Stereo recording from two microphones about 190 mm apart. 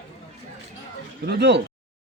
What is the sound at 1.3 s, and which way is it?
Speech, 65° right (ahead or behind).